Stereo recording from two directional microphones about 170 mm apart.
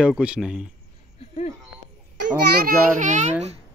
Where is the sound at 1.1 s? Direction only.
45° left (ahead or behind).